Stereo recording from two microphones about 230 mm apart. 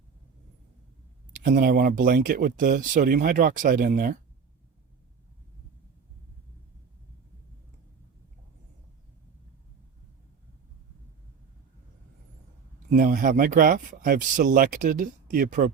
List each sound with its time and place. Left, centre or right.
1.3 s speech: right
12.9 s speech: right